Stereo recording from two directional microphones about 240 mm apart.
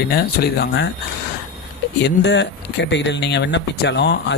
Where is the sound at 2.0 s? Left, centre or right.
Left.